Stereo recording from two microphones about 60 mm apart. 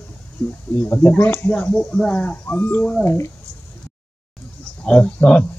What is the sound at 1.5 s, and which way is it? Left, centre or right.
Speech, left.